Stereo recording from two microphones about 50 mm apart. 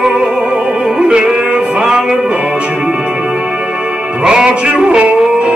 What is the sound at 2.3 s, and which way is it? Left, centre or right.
Music, right.